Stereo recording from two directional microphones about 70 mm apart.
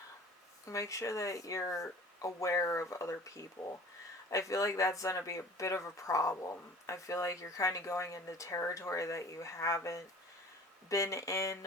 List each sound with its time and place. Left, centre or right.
0.7 s a woman's voice: left